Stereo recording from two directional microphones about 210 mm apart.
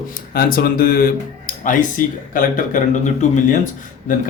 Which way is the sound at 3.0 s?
35° left (ahead or behind).